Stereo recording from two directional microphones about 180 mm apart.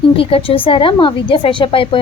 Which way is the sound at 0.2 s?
30° left (ahead or behind).